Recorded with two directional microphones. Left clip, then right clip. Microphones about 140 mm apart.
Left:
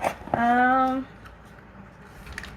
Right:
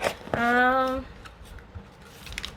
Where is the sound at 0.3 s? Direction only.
45° right (ahead or behind).